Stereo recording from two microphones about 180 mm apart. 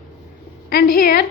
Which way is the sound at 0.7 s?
55° left (ahead or behind).